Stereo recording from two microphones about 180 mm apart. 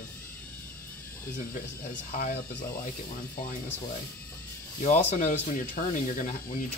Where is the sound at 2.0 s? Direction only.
50° left (ahead or behind).